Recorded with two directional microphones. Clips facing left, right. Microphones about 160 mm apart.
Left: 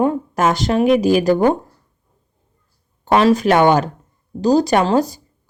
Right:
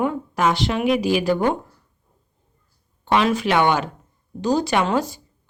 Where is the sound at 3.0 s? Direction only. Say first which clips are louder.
Left 6 dB; 40° left (ahead or behind).